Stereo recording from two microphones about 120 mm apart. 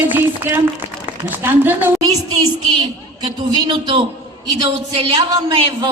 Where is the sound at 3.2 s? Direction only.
40° right (ahead or behind).